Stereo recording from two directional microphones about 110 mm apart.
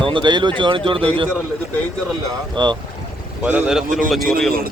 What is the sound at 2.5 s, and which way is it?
Speech, 45° right (ahead or behind).